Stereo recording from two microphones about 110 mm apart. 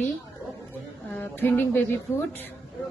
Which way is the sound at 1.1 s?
20° left (ahead or behind).